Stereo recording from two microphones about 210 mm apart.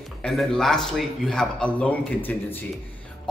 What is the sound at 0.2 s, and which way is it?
A man's voice, centre (ahead or behind).